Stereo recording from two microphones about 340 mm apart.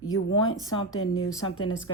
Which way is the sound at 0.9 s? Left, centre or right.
Left.